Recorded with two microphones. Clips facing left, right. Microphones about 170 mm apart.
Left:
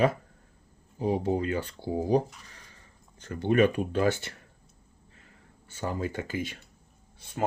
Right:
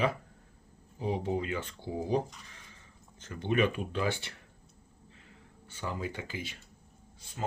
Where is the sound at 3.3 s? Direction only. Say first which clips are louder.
Left 6 dB; 45° left (ahead or behind).